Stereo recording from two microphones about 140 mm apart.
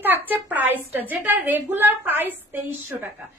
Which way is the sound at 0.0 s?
15° right (ahead or behind).